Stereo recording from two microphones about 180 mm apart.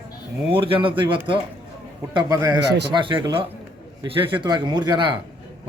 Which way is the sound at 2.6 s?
70° right (ahead or behind).